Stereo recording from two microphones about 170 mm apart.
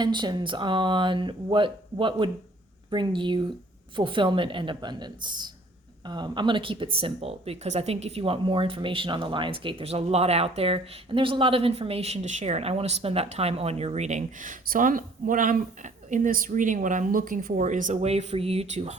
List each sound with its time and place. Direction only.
0.0 s speech: 25° right (ahead or behind); by 18.9 s 40° right (ahead or behind)